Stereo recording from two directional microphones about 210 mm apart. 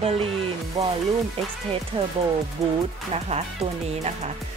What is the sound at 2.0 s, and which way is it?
Speech, 25° right (ahead or behind).